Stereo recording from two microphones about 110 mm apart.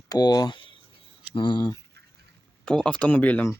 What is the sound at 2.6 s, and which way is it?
Speech, 10° left (ahead or behind).